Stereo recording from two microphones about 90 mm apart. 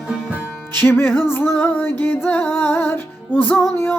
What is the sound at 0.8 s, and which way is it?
Music, 25° left (ahead or behind).